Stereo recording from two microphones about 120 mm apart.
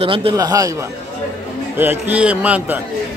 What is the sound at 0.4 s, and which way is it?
Speech, 30° right (ahead or behind).